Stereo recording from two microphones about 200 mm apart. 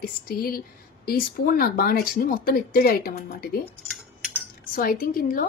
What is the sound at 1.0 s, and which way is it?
A woman's voice, 45° left (ahead or behind).